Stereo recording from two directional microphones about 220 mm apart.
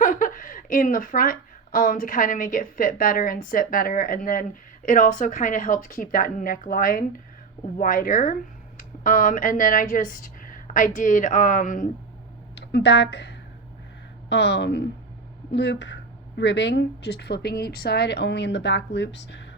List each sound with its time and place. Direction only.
0.0 s a woman's voice: 35° left (ahead or behind)
12.5 s a woman's voice: 50° left (ahead or behind)